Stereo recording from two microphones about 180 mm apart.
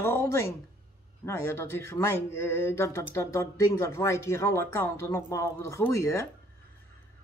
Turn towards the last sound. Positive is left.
turn(degrees=15)  # may be behind; listen again after turning